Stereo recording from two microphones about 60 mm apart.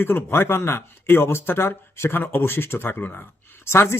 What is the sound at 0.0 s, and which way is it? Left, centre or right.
Speech, left.